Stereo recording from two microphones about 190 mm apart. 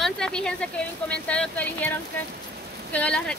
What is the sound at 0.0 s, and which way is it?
Speech, 5° left (ahead or behind).